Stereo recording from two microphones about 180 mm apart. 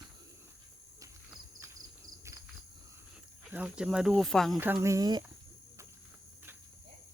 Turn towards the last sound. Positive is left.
turn(degrees=-20)  # may be behind; listen again after turning